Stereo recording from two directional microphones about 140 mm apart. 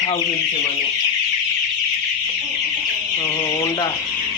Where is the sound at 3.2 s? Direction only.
20° left (ahead or behind).